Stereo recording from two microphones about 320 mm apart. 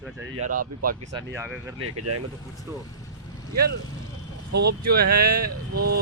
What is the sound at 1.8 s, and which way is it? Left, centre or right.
Speech, right.